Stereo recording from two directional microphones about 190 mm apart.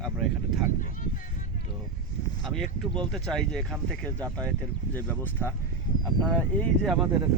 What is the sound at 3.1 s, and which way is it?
Speech, 5° left (ahead or behind).